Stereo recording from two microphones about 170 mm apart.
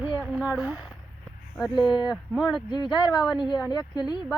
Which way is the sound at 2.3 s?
Centre (ahead or behind).